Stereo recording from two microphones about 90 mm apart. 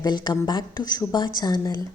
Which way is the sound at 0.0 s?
50° left (ahead or behind).